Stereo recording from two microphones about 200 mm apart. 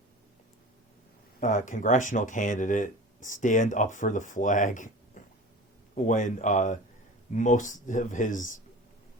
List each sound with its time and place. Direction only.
1.4 s speech: 40° left (ahead or behind)